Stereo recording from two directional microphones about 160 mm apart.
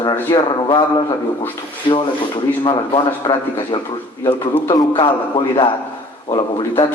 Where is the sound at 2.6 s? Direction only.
30° left (ahead or behind).